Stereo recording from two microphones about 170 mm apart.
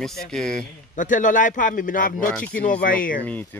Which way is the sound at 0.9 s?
50° left (ahead or behind).